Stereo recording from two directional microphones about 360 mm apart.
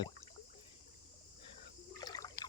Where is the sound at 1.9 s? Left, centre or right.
Centre.